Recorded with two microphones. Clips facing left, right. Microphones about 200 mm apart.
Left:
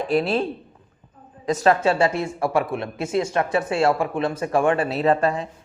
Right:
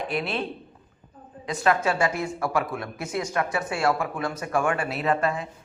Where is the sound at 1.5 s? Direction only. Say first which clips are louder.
Left 5 dB; 40° left (ahead or behind).